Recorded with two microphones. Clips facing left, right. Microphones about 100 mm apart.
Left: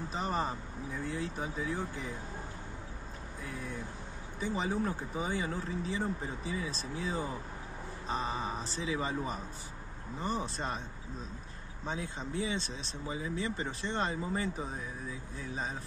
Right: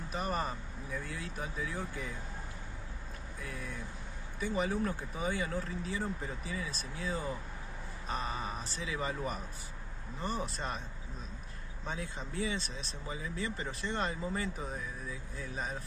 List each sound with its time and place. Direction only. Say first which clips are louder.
0.1 s speech: left 1 dB; 25° left (ahead or behind)
4.4 s speech: even; 25° left (ahead or behind)
11.8 s speech: left 2 dB; 30° left (ahead or behind)